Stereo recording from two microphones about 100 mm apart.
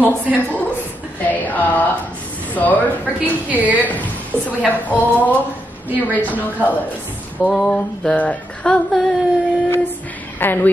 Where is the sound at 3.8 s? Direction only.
15° left (ahead or behind).